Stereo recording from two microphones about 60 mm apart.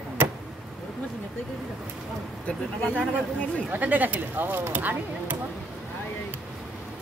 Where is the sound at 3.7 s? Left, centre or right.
Right.